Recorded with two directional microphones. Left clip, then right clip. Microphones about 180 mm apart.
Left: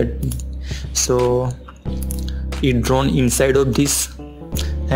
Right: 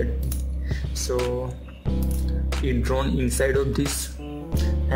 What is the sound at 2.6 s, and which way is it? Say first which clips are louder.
Speech: left 8 dB; 25° left (ahead or behind).